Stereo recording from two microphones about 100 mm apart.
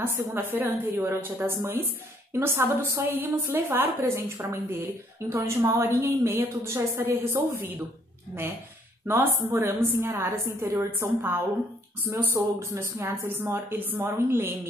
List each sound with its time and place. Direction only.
0.0 s a woman's voice: 20° right (ahead or behind)
9.0 s a woman's voice: 25° right (ahead or behind)